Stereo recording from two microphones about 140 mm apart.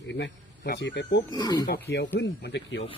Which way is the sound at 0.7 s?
90° left.